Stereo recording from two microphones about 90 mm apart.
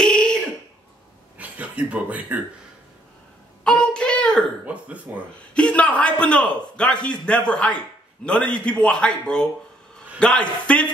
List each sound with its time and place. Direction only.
0.0 s cough: 10° left (ahead or behind)
1.4 s speech: 15° right (ahead or behind)
3.6 s a sound: 10° left (ahead or behind)
4.6 s speech: 15° right (ahead or behind)
5.5 s a man's voice: 10° left (ahead or behind)